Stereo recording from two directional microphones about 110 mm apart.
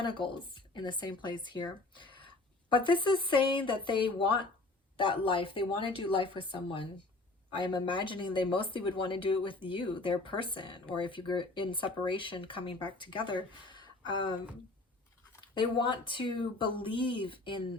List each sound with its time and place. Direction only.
0.0 s speech: 50° left (ahead or behind)
15.4 s speech: 45° left (ahead or behind)